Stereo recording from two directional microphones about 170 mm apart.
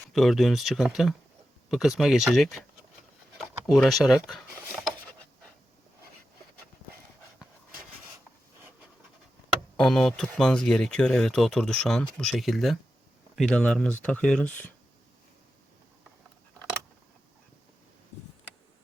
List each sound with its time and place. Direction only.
0.1 s speech: centre (ahead or behind)
3.3 s a sound: centre (ahead or behind)
9.7 s speech: 5° left (ahead or behind)